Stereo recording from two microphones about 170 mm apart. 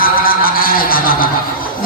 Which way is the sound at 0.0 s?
60° left (ahead or behind).